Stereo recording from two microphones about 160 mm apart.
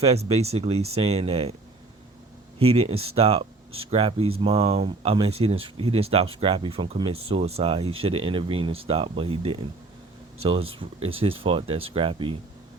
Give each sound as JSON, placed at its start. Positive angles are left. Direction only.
{"t": 0.0, "sound": "speech", "side_deg": -40}
{"t": 2.6, "sound": "speech", "side_deg": -40}